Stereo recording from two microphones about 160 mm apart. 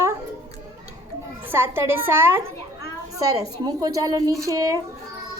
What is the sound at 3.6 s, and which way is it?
Speech, 25° right (ahead or behind).